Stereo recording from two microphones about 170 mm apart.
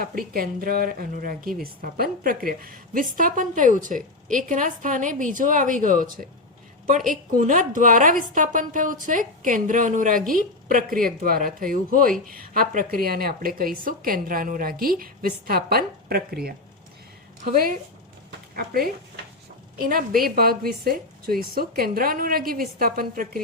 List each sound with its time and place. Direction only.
0.0 s a woman's voice: 60° right (ahead or behind)
18.3 s a sound: 60° right (ahead or behind)
19.8 s speech: 60° right (ahead or behind)